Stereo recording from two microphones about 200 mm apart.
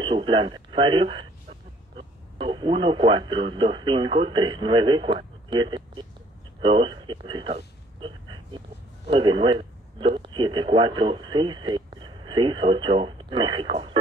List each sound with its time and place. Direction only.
0.0 s speech: 25° right (ahead or behind)